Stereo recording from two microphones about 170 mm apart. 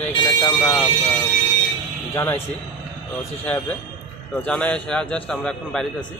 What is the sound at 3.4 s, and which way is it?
Speech, 10° left (ahead or behind).